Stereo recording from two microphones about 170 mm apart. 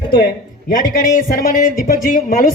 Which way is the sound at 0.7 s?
55° left (ahead or behind).